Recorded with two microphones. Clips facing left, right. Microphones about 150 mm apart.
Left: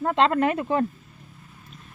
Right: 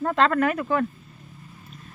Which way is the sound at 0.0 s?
25° left (ahead or behind).